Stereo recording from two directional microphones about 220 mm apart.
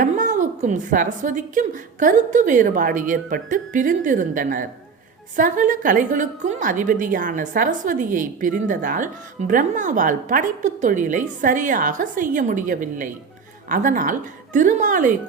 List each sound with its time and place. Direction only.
0.0 s a woman's voice: 35° right (ahead or behind)